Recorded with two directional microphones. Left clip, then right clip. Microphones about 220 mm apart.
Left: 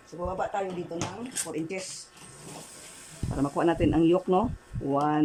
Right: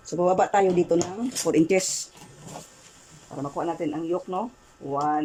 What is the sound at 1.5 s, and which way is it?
Speech, 45° right (ahead or behind).